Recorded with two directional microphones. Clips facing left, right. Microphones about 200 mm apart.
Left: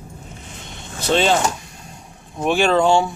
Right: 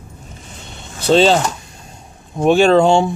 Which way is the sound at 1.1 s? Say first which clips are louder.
Right 5 dB; 30° right (ahead or behind).